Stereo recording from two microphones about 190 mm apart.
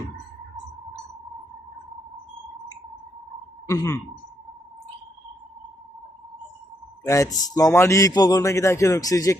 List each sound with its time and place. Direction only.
3.7 s a man's voice: 15° left (ahead or behind)
7.0 s a man's voice: 15° left (ahead or behind)